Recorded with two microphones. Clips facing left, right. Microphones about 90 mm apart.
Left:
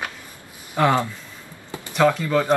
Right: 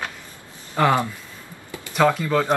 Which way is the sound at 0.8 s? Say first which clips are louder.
Even; centre (ahead or behind).